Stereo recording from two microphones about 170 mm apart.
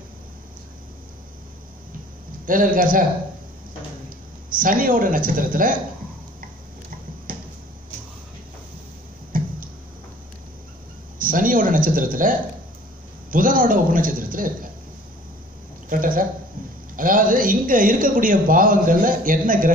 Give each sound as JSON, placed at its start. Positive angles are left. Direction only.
{"t": 2.4, "sound": "a man's voice", "side_deg": -55}
{"t": 4.5, "sound": "a man's voice", "side_deg": -55}
{"t": 7.3, "sound": "a sound", "side_deg": -55}
{"t": 9.3, "sound": "tick-tock", "side_deg": -55}
{"t": 11.1, "sound": "a man's voice", "side_deg": -55}
{"t": 15.9, "sound": "a man's voice", "side_deg": -55}